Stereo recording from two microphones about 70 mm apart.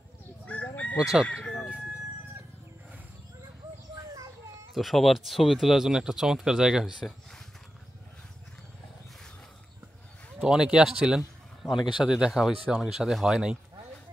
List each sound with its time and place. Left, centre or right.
0.5 s chicken: centre
3.9 s a sound: right
4.7 s speech: centre
10.4 s speech: centre